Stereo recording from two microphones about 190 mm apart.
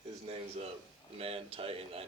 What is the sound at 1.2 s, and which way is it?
Speech, 30° right (ahead or behind).